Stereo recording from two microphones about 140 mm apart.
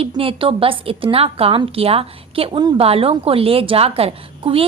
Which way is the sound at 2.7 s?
45° right (ahead or behind).